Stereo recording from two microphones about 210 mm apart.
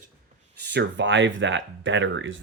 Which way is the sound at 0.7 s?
60° right (ahead or behind).